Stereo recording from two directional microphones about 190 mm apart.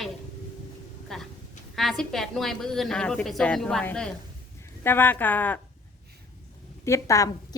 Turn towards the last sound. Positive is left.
turn(degrees=15)  # may be behind; listen again after turning